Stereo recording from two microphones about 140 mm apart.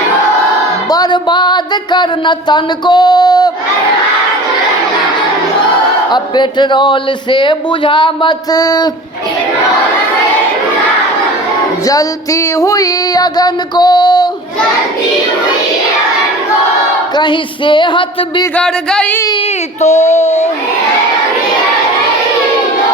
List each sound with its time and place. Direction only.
0.9 s music: 30° left (ahead or behind)
6.1 s a man's voice: 30° left (ahead or behind)
11.9 s female singing: 25° left (ahead or behind)
17.2 s a man's voice: 35° left (ahead or behind)
18.5 s music: 5° left (ahead or behind)
19.8 s a child's voice: 55° left (ahead or behind)